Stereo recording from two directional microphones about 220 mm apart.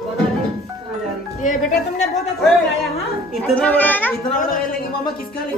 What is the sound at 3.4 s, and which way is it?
Speech, 5° left (ahead or behind).